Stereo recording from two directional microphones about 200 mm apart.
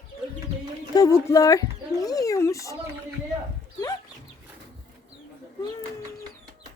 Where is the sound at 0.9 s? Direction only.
15° left (ahead or behind).